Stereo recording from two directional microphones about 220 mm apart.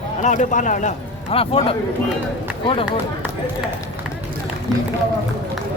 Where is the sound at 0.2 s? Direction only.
35° left (ahead or behind).